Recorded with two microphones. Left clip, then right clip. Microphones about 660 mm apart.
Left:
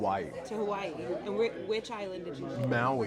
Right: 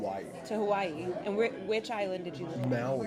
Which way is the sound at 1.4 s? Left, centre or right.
Right.